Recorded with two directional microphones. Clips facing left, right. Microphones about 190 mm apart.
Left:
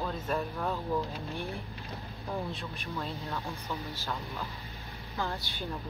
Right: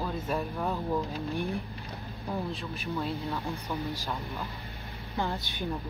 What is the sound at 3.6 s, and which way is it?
Speech, 15° right (ahead or behind).